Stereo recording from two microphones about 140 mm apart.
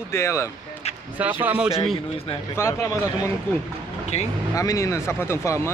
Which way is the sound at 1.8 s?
40° left (ahead or behind).